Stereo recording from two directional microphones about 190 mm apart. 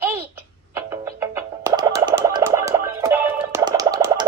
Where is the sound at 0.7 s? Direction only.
15° right (ahead or behind).